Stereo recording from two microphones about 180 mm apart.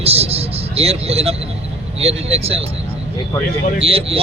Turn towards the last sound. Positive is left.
turn(degrees=-30)  # may be behind; listen again after turning